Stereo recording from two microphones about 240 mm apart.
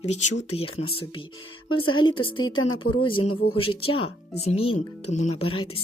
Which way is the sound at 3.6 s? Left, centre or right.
Left.